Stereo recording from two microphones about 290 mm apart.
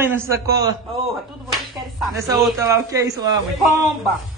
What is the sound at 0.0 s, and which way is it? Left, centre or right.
Speech, centre.